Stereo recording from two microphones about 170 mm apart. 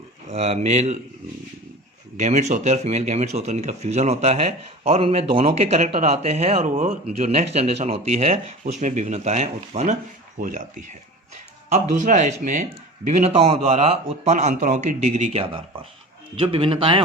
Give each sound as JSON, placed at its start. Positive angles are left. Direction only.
{"t": 0.3, "sound": "speech", "side_deg": -40}
{"t": 2.1, "sound": "speech", "side_deg": -40}
{"t": 11.7, "sound": "speech", "side_deg": -45}